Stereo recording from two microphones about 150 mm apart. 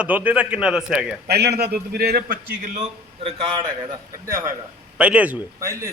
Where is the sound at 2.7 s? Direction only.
40° right (ahead or behind).